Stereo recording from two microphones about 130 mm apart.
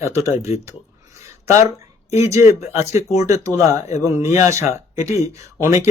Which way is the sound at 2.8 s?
55° left (ahead or behind).